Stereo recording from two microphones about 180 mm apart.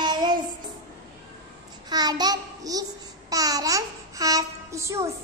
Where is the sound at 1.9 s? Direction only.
20° right (ahead or behind).